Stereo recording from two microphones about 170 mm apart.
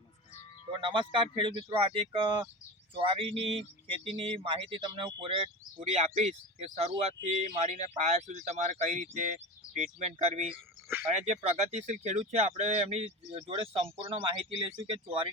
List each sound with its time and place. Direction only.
0.7 s speech: 30° right (ahead or behind)
5.7 s speech: 40° right (ahead or behind)
10.5 s a sound: 10° right (ahead or behind)
11.0 s speech: 40° right (ahead or behind)